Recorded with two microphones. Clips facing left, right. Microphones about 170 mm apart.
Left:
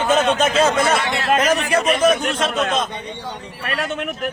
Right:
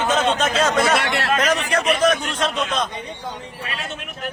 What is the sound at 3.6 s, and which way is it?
Speech, 60° left (ahead or behind).